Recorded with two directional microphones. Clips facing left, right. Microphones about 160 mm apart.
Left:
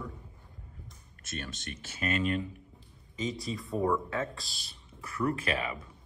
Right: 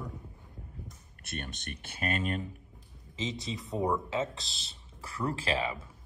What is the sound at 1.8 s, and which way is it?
Speech, 50° right (ahead or behind).